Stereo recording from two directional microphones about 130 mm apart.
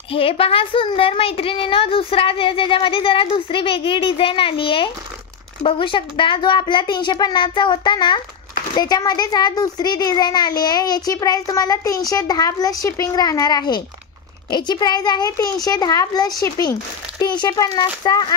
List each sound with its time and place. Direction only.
0.1 s a woman's voice: 45° left (ahead or behind)